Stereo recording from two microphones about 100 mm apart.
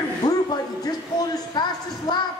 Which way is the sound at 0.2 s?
40° left (ahead or behind).